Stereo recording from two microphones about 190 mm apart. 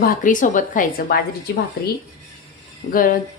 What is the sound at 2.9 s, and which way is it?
Speech, 50° left (ahead or behind).